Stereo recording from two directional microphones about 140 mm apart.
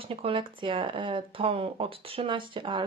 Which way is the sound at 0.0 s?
40° right (ahead or behind).